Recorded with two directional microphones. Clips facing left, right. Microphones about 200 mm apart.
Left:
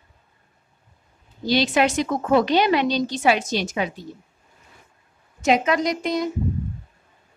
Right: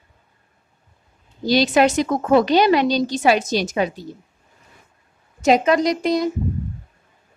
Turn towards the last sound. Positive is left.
turn(degrees=-35)  # may be behind; listen again after turning